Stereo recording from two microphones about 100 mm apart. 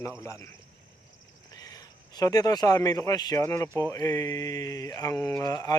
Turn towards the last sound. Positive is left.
turn(degrees=40)  # may be behind; listen again after turning